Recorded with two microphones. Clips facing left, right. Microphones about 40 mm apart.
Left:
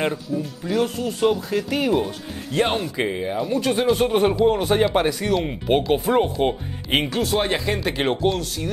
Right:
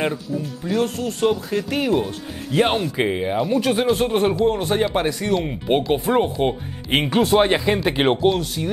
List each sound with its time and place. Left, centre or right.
0.7 s speech: centre
2.5 s speech: centre
3.4 s speech: centre
7.1 s speech: right